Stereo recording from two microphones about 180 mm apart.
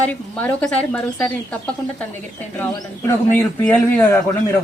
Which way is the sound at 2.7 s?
20° left (ahead or behind).